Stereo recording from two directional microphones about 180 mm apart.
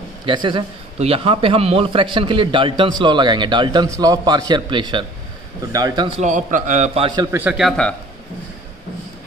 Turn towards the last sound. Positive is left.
turn(degrees=0)  # may be behind; listen again after turning